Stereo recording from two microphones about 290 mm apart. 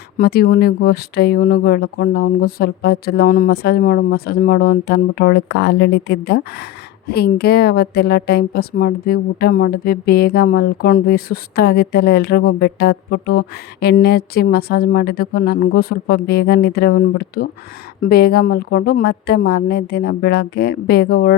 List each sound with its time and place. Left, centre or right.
0.2 s a woman's voice: left